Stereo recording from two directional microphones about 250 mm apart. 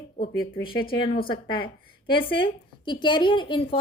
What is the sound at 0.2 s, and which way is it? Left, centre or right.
A woman's voice, centre.